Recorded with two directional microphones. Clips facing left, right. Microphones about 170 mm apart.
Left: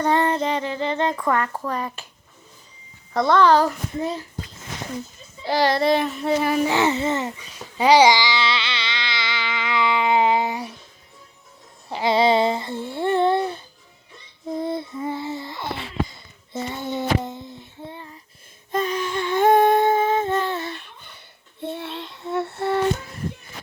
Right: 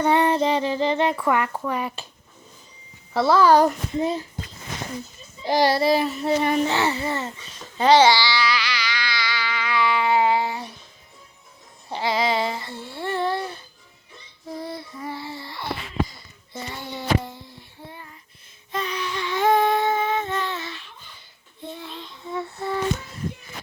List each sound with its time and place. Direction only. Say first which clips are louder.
0.0 s speech: right 1 dB; 10° right (ahead or behind)
3.1 s speech: even; 5° right (ahead or behind)
5.5 s a child's voice: even; 15° right (ahead or behind); by 6.7 s 5° left (ahead or behind)
6.7 s babbling: left 3 dB; 20° left (ahead or behind)
11.9 s a sound: left 5 dB; 25° left (ahead or behind)
16.5 s child singing: left 6 dB; 25° left (ahead or behind)
18.7 s a sound: left 5 dB; 45° left (ahead or behind)
21.6 s child singing: left 6 dB; 65° left (ahead or behind)